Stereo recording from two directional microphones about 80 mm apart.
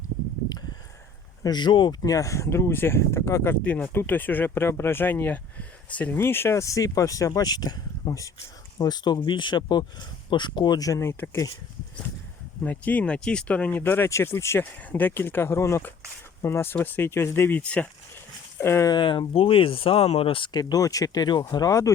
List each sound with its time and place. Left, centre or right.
1.5 s speech: left
2.0 s speech: left
3.5 s speech: centre
6.1 s speech: left
10.2 s speech: left
11.0 s speech: left
12.6 s speech: centre
17.6 s speech: centre
18.6 s speech: left
18.9 s speech: left
20.6 s speech: left
21.7 s speech: left